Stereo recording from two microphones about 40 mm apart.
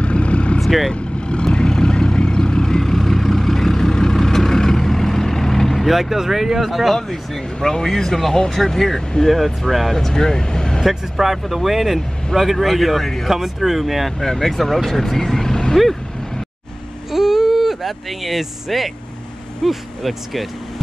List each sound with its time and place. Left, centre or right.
0.0 s vehicle: left
0.6 s vehicle: centre
0.9 s vehicle: left; by 5.9 s centre
5.9 s speech: centre
7.6 s speech: centre
9.9 s speech: centre
10.8 s speech: centre
15.7 s vehicle: centre
17.1 s vehicle: centre
19.6 s speech: centre